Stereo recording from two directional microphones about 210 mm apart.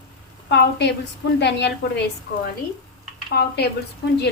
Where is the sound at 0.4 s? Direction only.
55° left (ahead or behind).